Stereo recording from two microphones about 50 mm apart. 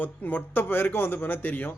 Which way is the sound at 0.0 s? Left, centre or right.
Left.